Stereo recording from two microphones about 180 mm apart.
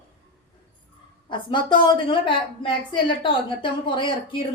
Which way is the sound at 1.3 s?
25° left (ahead or behind).